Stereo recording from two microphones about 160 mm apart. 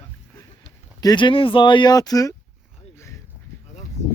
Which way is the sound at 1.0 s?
30° left (ahead or behind).